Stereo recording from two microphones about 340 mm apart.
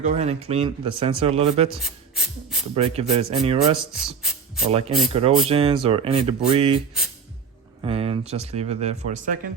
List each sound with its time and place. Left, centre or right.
0.0 s speech: centre
1.8 s a sound: centre
2.7 s speech: centre
3.8 s speech: centre
4.7 s speech: centre